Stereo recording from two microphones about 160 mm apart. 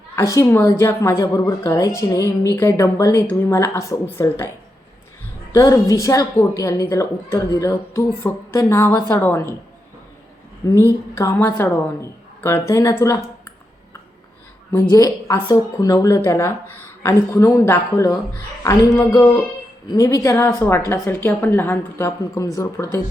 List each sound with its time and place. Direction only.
0.2 s a woman's voice: 15° left (ahead or behind)
5.5 s a woman's voice: 20° left (ahead or behind)
10.7 s a woman's voice: 15° left (ahead or behind)
14.7 s a woman's voice: 20° left (ahead or behind)